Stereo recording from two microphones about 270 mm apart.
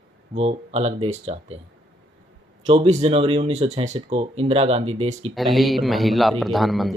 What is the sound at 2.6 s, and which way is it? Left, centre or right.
Speech, right.